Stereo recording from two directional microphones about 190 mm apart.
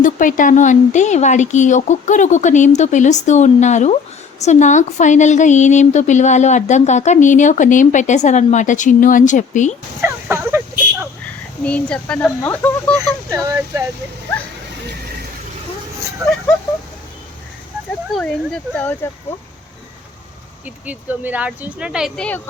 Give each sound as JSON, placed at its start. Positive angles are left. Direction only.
{"t": 0.0, "sound": "a woman's voice", "side_deg": 45}
{"t": 10.0, "sound": "a sound", "side_deg": -10}
{"t": 11.6, "sound": "speech", "side_deg": 5}
{"t": 13.0, "sound": "speech", "side_deg": -15}
{"t": 16.2, "sound": "a sound", "side_deg": 0}
{"t": 18.1, "sound": "speech", "side_deg": 5}
{"t": 20.7, "sound": "speech", "side_deg": -10}